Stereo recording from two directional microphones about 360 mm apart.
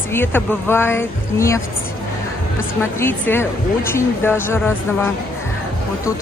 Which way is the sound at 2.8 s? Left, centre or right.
Centre.